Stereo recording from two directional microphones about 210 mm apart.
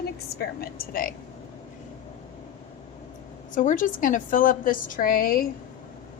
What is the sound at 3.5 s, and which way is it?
A woman's voice, 40° left (ahead or behind).